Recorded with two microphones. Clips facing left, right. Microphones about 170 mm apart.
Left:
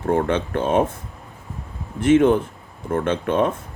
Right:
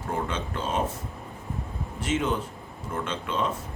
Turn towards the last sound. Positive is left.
turn(degrees=55)  # may be behind; listen again after turning